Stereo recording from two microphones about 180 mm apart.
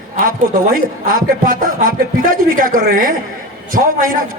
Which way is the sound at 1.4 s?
50° right (ahead or behind).